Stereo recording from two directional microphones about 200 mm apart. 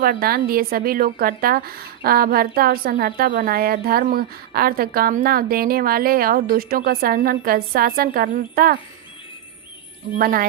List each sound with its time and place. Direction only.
0.0 s a woman's voice: 45° right (ahead or behind)
10.2 s a woman's voice: 45° right (ahead or behind)